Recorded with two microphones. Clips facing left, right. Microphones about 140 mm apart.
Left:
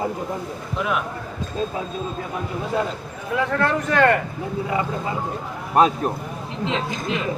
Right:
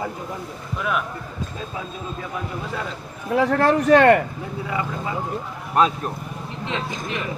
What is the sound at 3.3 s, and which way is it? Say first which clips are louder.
Speech: right 4 dB; 30° right (ahead or behind).